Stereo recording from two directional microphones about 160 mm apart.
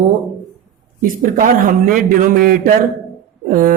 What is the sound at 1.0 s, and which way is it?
A man's voice, 60° right (ahead or behind).